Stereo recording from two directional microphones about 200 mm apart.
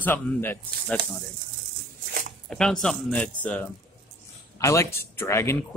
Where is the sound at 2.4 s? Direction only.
5° left (ahead or behind).